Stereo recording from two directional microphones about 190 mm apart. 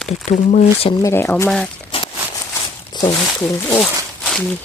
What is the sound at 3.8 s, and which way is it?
Zipper, centre (ahead or behind).